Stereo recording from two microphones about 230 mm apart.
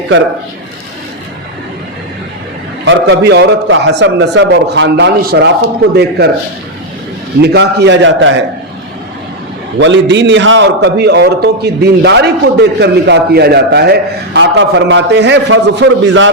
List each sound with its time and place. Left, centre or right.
2.8 s a man's voice: right
7.4 s a man's voice: right
9.8 s a man's voice: right